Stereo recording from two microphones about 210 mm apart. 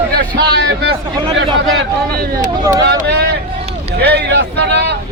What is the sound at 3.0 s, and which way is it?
Speech, 50° right (ahead or behind).